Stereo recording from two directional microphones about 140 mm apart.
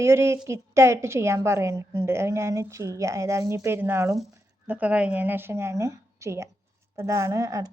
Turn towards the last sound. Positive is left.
turn(degrees=-25)  # may be behind; listen again after turning